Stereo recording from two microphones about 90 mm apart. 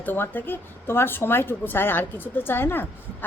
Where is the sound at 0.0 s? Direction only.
20° left (ahead or behind).